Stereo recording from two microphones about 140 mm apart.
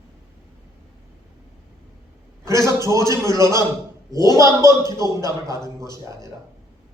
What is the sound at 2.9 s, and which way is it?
A man's voice, 20° right (ahead or behind).